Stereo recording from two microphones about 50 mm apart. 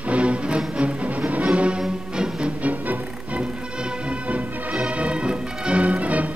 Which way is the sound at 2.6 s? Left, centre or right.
Right.